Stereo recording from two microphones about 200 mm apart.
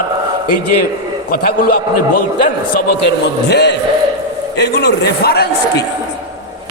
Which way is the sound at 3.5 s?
55° left (ahead or behind).